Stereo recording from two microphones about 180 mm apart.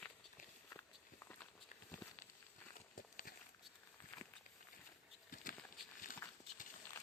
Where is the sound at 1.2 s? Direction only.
10° left (ahead or behind).